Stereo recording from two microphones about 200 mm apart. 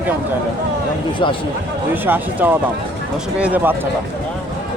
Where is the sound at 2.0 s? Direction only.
10° right (ahead or behind).